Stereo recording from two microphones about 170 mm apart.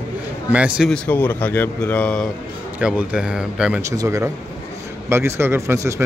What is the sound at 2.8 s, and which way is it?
Speech, 5° right (ahead or behind).